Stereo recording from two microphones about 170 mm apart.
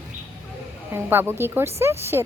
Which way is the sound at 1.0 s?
15° right (ahead or behind).